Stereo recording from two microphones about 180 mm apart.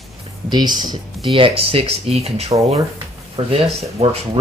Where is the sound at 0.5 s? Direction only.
25° right (ahead or behind).